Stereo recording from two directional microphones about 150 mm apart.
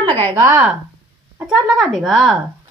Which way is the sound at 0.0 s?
35° right (ahead or behind).